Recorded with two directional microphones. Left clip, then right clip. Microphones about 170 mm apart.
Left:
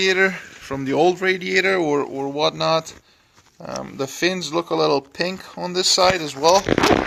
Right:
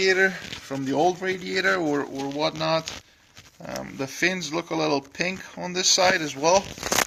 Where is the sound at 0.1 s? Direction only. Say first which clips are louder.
Left 3 dB; 50° left (ahead or behind).